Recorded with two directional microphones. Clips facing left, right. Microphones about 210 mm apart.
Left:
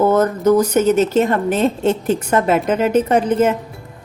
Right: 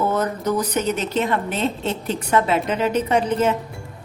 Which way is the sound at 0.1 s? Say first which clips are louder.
Left 8 dB; 45° left (ahead or behind).